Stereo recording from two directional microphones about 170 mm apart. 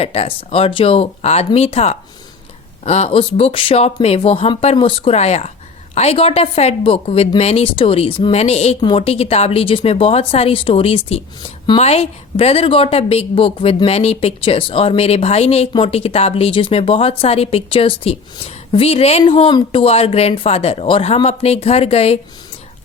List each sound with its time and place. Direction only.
0.0 s a woman's voice: 35° left (ahead or behind)